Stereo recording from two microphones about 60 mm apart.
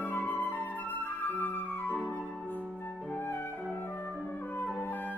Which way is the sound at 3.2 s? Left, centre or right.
Left.